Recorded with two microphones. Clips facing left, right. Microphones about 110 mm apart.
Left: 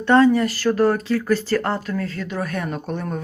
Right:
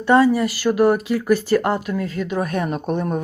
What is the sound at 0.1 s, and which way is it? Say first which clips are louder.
Speech: even; 10° right (ahead or behind).